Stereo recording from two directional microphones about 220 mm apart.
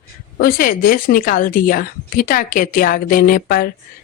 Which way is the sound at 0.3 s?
45° left (ahead or behind).